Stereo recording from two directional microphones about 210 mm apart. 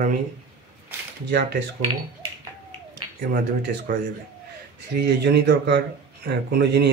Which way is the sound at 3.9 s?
45° right (ahead or behind).